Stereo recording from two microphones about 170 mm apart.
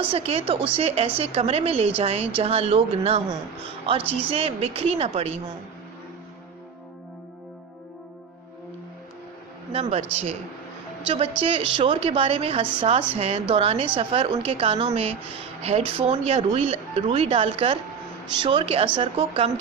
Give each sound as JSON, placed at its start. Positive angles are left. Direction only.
{"t": 0.1, "sound": "a woman's voice", "side_deg": -35}
{"t": 9.7, "sound": "speech", "side_deg": -35}
{"t": 11.4, "sound": "a woman's voice", "side_deg": -30}